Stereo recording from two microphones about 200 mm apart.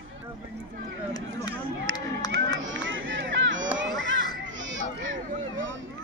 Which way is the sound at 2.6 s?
70° right (ahead or behind).